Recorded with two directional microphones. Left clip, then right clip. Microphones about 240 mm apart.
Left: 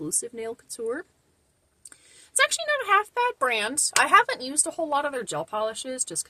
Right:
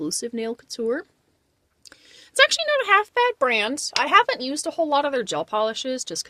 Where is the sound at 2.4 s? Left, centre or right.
Right.